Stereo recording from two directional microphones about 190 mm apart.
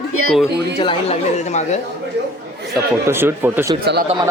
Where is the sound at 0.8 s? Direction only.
30° left (ahead or behind).